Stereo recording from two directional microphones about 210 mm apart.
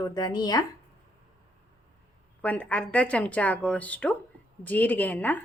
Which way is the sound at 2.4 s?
5° left (ahead or behind).